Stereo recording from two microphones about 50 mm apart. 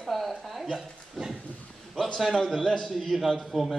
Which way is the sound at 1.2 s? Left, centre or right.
Centre.